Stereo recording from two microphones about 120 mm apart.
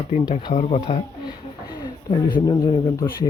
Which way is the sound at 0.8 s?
40° left (ahead or behind).